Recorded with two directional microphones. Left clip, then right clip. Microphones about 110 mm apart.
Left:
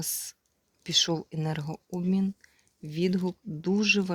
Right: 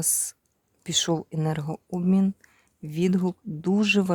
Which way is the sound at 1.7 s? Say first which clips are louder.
Right 5 dB; 40° right (ahead or behind).